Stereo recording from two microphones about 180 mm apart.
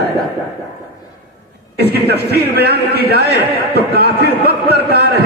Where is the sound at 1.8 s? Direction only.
65° right (ahead or behind).